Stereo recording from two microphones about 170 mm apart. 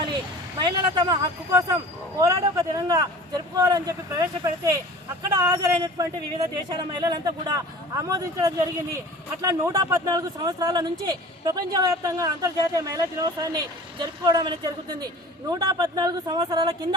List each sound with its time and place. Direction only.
0.6 s speech: 25° right (ahead or behind)